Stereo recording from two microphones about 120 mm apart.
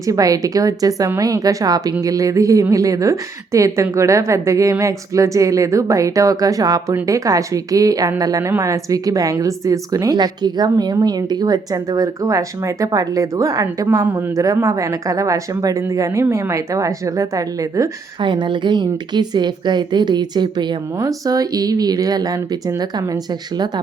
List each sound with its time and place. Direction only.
0.0 s a woman's voice: 30° right (ahead or behind)
18.2 s a woman's voice: 40° right (ahead or behind)